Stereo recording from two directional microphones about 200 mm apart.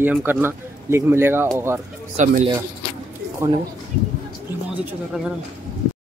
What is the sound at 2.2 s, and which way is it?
Speech, 35° right (ahead or behind).